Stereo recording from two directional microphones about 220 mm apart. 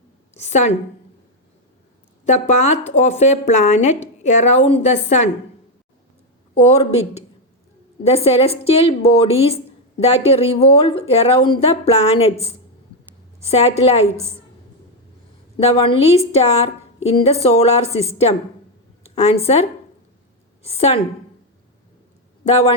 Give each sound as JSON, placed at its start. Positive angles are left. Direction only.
{"t": 0.3, "sound": "speech", "side_deg": 30}
{"t": 2.2, "sound": "speech", "side_deg": 30}
{"t": 6.7, "sound": "a woman's voice", "side_deg": 25}
{"t": 15.5, "sound": "a woman's voice", "side_deg": 25}
{"t": 22.4, "sound": "a woman's voice", "side_deg": 30}